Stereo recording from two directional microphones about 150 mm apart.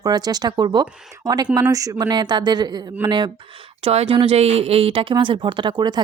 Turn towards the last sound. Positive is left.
turn(degrees=-30)  # may be behind; listen again after turning